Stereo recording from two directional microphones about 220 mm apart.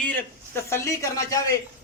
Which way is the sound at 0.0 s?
10° left (ahead or behind).